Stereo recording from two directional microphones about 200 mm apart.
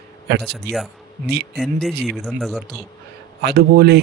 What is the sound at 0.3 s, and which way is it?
Speech, 55° right (ahead or behind).